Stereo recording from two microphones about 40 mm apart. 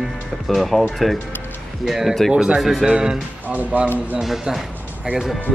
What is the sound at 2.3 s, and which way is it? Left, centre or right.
Speech, right.